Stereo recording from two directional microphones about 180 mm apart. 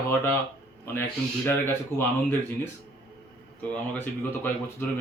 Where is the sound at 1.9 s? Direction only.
10° left (ahead or behind).